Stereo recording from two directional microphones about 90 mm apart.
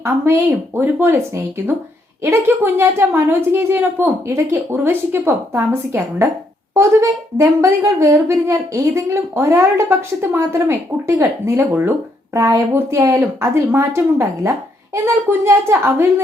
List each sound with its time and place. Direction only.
0.0 s speech: 25° right (ahead or behind)
12.3 s speech: 35° right (ahead or behind)